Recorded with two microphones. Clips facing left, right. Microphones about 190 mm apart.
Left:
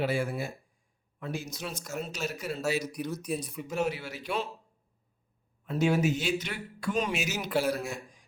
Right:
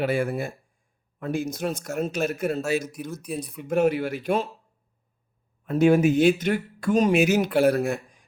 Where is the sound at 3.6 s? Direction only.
55° right (ahead or behind).